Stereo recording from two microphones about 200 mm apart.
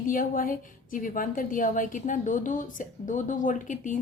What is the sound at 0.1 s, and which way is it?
A woman's voice, 45° left (ahead or behind).